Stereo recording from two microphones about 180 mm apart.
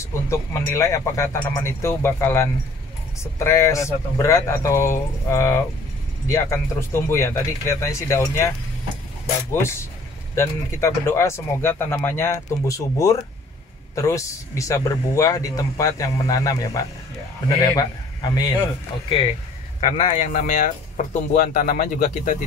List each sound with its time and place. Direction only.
0.0 s speech: 15° left (ahead or behind)
19.9 s speech: 40° left (ahead or behind)